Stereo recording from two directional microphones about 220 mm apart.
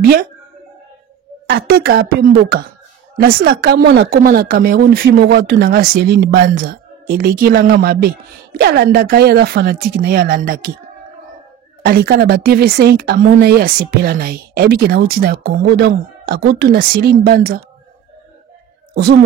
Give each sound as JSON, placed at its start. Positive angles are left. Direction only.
{"t": 1.5, "sound": "speech", "side_deg": -45}
{"t": 3.2, "sound": "speech", "side_deg": -45}
{"t": 11.8, "sound": "speech", "side_deg": -45}